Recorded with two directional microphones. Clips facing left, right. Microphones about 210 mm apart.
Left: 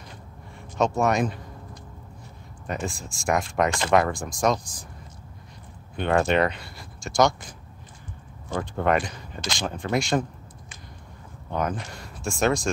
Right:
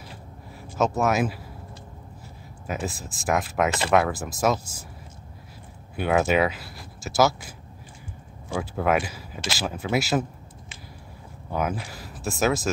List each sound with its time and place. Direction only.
0.6 s speech: 5° right (ahead or behind)
2.6 s speech: 5° right (ahead or behind)
5.9 s speech: 5° right (ahead or behind)
11.5 s speech: 5° right (ahead or behind)